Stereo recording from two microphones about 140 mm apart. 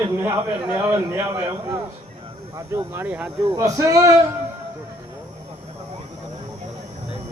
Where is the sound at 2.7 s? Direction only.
20° right (ahead or behind).